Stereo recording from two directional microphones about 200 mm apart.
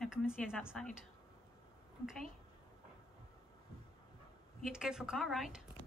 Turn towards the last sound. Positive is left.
turn(degrees=0)  # may be behind; listen again after turning